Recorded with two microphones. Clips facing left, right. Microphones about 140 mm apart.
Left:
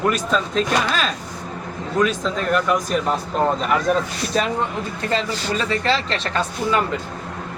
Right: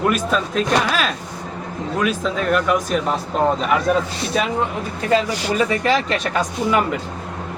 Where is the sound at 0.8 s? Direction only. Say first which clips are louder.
Right 1 dB; 5° right (ahead or behind).